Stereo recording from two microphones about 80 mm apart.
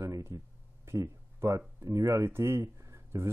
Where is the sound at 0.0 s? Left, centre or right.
Right.